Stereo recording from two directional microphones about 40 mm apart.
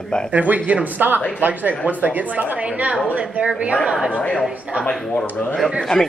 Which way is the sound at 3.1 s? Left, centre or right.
Right.